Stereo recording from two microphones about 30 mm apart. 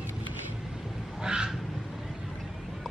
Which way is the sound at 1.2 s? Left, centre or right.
Right.